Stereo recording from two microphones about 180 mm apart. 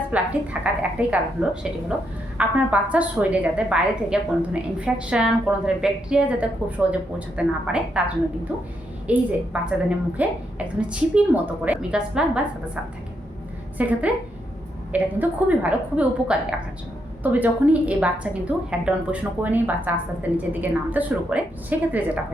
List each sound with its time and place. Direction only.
0.1 s a woman's voice: 10° right (ahead or behind)
9.0 s a woman's voice: 5° right (ahead or behind)